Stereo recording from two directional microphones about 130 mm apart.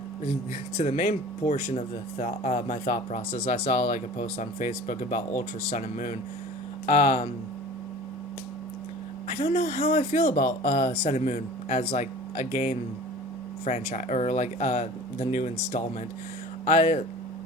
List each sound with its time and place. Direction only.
0.8 s speech: 70° left (ahead or behind)
6.8 s speech: 65° left (ahead or behind)
9.6 s speech: 75° left (ahead or behind)
16.6 s speech: 65° left (ahead or behind)